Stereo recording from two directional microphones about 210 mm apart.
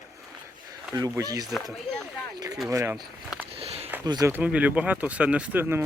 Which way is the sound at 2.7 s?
15° right (ahead or behind).